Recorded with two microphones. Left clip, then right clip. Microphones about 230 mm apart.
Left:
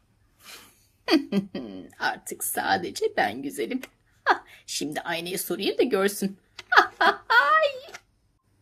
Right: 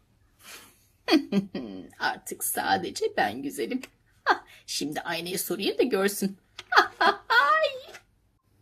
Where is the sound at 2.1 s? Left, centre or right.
Centre.